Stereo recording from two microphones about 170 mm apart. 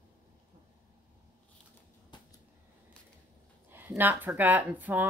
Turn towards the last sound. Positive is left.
turn(degrees=-10)  # may be behind; listen again after turning